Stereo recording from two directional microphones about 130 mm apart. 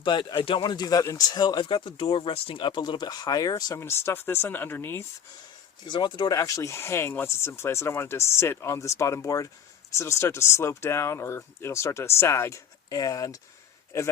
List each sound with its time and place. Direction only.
0.0 s speech: 35° left (ahead or behind); by 5.0 s 15° left (ahead or behind)
5.9 s speech: 35° left (ahead or behind)